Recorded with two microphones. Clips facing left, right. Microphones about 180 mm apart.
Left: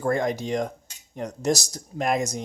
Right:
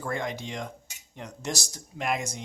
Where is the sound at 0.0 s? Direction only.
40° left (ahead or behind).